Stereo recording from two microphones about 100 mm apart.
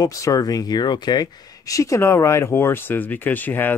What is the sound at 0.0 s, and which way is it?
Speech, 35° left (ahead or behind).